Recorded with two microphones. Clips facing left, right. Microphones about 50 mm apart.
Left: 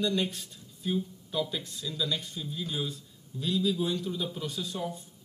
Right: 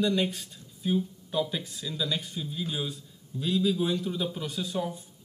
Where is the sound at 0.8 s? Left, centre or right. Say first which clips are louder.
Right 3 dB; right.